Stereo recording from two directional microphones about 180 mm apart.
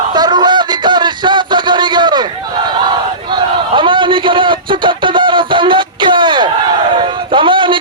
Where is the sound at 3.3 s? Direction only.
25° right (ahead or behind).